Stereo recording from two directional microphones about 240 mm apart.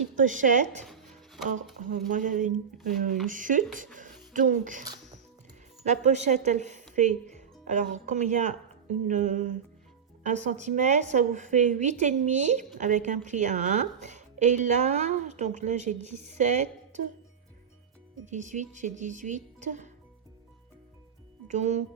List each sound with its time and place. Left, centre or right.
0.2 s a woman's voice: right
0.9 s music: centre
2.0 s a woman's voice: right
5.8 s a woman's voice: right
18.3 s a woman's voice: right
21.4 s speech: right